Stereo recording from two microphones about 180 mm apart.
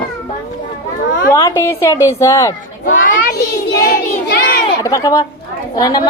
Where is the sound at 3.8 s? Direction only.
60° left (ahead or behind).